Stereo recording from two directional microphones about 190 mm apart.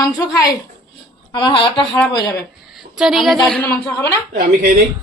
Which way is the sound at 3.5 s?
5° left (ahead or behind).